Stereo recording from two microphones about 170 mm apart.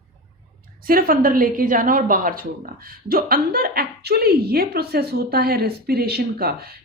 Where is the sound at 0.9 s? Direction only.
60° right (ahead or behind).